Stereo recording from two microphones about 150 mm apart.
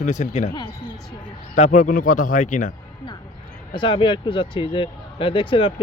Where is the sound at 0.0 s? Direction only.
50° left (ahead or behind).